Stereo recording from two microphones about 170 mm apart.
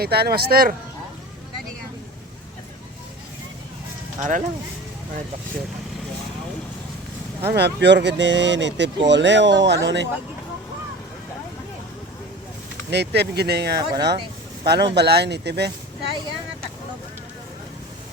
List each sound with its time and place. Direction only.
0.0 s speech: 65° right (ahead or behind)
4.2 s speech: 50° right (ahead or behind)
7.5 s speech: 85° right
12.9 s speech: 80° right